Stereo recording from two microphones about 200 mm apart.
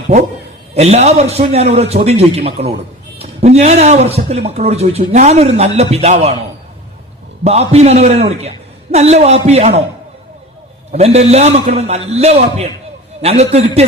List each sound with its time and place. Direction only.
0.7 s a man's voice: 30° right (ahead or behind)
7.4 s a man's voice: 30° right (ahead or behind)
10.9 s a man's voice: 35° right (ahead or behind)